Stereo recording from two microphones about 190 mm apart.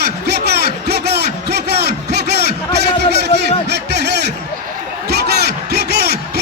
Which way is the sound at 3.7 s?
60° right (ahead or behind).